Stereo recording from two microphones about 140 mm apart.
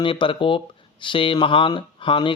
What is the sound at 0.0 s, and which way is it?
Speech, 35° left (ahead or behind).